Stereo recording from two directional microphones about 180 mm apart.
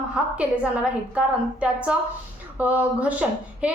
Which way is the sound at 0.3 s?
5° right (ahead or behind).